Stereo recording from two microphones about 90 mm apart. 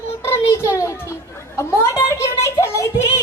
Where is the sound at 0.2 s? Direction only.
30° left (ahead or behind).